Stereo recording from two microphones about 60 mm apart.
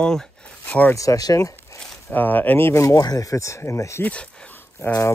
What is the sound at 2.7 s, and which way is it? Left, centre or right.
Speech, left.